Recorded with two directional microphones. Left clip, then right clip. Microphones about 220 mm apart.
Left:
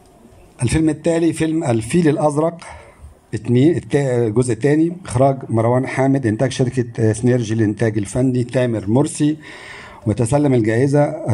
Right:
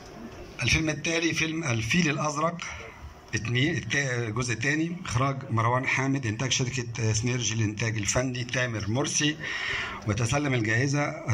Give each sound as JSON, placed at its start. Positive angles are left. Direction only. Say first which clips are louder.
{"t": 0.6, "sound": "a man's voice", "louder": "left 7 dB", "side_deg": 55}